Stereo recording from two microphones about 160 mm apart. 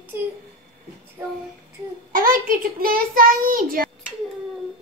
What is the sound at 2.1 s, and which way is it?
A child's voice, 65° right (ahead or behind).